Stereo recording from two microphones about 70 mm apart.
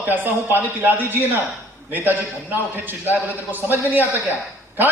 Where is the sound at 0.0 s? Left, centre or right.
Right.